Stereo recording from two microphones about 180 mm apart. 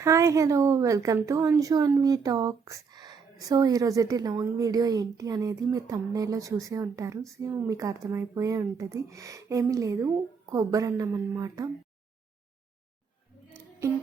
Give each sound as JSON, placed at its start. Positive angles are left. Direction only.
{"t": 0.0, "sound": "a woman's voice", "side_deg": -15}
{"t": 13.8, "sound": "a woman's voice", "side_deg": -15}